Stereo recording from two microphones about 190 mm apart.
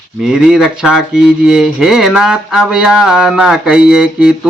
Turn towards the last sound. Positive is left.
turn(degrees=-5)  # may be behind; listen again after turning